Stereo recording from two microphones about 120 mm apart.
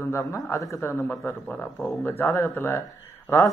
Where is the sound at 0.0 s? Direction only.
25° left (ahead or behind).